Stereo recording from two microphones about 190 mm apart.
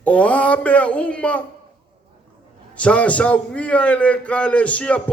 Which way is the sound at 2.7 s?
5° left (ahead or behind).